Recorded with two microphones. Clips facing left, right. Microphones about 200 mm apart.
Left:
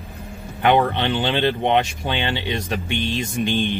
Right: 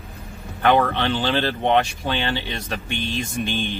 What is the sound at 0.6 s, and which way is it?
Speech, 20° left (ahead or behind).